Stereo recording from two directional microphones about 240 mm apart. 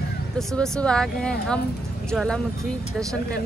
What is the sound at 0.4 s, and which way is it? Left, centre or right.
A woman's voice, centre.